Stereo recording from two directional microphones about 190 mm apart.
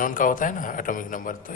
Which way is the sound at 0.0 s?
45° left (ahead or behind).